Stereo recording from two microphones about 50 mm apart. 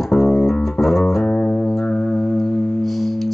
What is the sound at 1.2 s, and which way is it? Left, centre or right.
Music, left.